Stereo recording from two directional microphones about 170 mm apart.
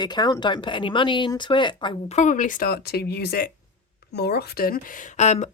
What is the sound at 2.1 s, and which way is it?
Speech, 45° left (ahead or behind).